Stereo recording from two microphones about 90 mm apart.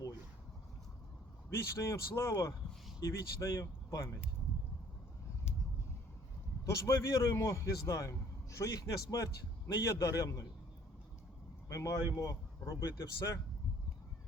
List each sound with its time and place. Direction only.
1.5 s a man's voice: 30° left (ahead or behind)
2.3 s a man's voice: 40° left (ahead or behind)
6.7 s a man's voice: 35° left (ahead or behind)
11.7 s a man's voice: 35° left (ahead or behind)